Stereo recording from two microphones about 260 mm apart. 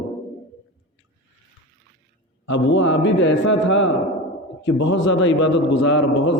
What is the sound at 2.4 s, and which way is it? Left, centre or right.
A man's voice, left.